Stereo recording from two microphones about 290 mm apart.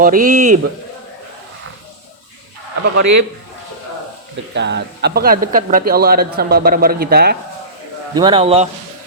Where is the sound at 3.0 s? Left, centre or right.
Right.